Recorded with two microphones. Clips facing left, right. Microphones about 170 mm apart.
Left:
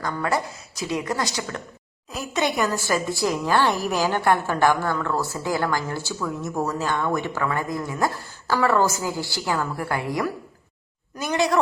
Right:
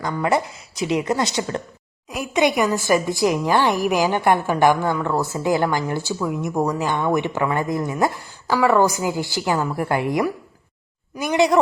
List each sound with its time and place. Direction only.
0.0 s a woman's voice: 20° right (ahead or behind)